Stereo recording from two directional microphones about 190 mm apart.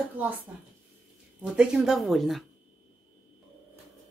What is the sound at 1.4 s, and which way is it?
Speech, 5° right (ahead or behind).